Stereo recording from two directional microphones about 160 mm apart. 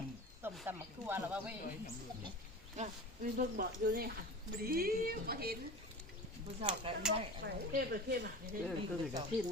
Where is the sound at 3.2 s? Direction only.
70° right (ahead or behind).